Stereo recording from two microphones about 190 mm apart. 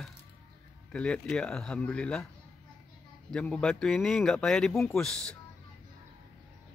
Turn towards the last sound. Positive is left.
turn(degrees=5)  # may be behind; listen again after turning